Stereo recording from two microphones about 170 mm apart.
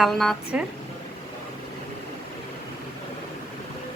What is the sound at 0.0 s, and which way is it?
Speech, centre (ahead or behind).